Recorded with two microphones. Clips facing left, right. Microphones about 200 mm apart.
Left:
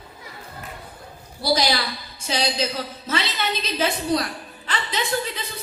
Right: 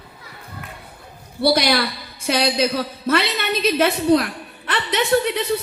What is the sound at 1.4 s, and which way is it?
A woman's voice, 60° right (ahead or behind).